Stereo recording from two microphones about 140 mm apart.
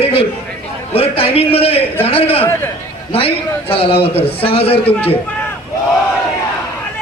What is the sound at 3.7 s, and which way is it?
A man's voice, 40° left (ahead or behind).